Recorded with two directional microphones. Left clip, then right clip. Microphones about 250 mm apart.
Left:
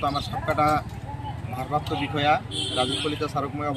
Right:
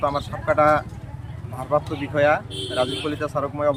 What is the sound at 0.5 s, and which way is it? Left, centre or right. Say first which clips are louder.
Speech: right 5 dB; centre.